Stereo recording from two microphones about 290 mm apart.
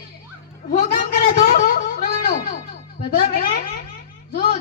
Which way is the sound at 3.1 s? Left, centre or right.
Left.